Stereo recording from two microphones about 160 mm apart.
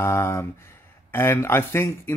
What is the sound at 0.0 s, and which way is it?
Speech, 15° left (ahead or behind).